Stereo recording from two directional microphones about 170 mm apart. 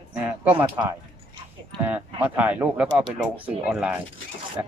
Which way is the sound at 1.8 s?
10° right (ahead or behind).